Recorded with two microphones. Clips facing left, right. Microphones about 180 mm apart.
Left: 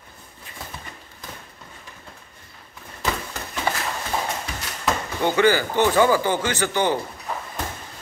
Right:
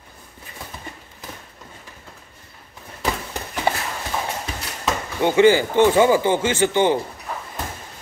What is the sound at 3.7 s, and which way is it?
Clip-clop, 30° right (ahead or behind).